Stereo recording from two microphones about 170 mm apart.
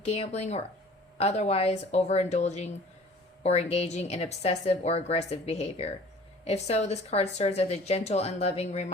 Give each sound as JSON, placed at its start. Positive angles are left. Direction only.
{"t": 0.0, "sound": "a woman's voice", "side_deg": 40}